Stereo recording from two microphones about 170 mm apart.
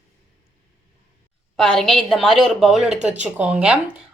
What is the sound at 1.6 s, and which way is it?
A woman's voice, centre (ahead or behind).